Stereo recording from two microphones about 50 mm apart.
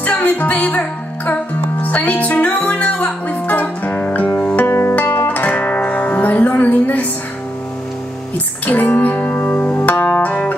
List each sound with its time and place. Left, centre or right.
0.0 s music: left
4.6 s music: left
5.3 s music: left
8.6 s music: left